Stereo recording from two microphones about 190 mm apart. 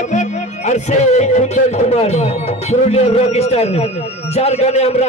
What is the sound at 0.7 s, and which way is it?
A man's voice, 40° left (ahead or behind).